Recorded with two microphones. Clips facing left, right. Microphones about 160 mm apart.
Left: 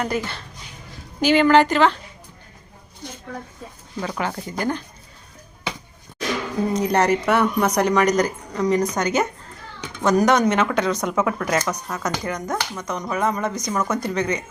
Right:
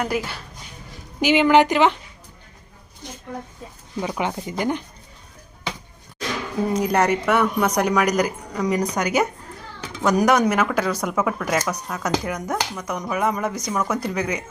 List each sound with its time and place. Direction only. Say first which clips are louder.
0.0 s speech: even; 5° right (ahead or behind)
4.0 s speech: right 1 dB; 15° right (ahead or behind)
6.7 s speech: left 1 dB; 5° right (ahead or behind)